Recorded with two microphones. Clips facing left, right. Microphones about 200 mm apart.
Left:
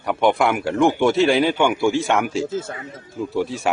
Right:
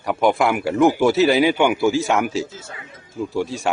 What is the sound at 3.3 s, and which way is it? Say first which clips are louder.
Speech: left 1 dB; centre (ahead or behind).